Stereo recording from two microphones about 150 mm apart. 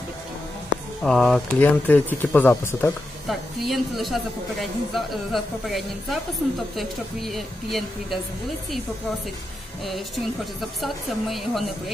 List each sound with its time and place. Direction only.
1.0 s a woman's voice: centre (ahead or behind)
1.6 s speech: 10° left (ahead or behind)
3.3 s a woman's voice: centre (ahead or behind)
9.8 s a woman's voice: centre (ahead or behind)